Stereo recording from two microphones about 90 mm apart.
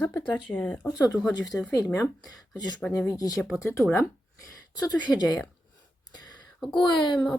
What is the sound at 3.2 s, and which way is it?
Speech, 45° left (ahead or behind).